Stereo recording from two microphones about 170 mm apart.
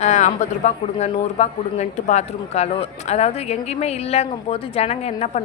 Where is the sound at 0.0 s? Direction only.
40° left (ahead or behind).